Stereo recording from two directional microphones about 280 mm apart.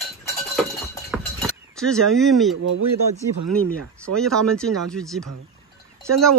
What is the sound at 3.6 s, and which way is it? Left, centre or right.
Speech, right.